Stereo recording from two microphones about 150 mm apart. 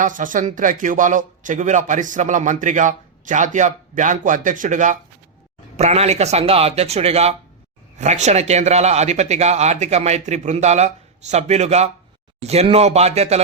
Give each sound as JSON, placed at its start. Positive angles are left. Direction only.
{"t": 0.0, "sound": "speech", "side_deg": -60}